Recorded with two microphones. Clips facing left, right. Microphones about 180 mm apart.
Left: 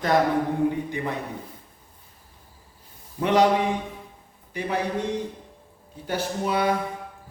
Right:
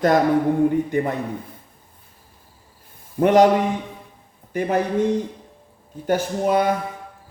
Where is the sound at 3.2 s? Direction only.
50° right (ahead or behind).